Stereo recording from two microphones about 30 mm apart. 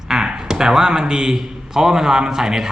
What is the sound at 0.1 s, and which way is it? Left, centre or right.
A man's voice, right.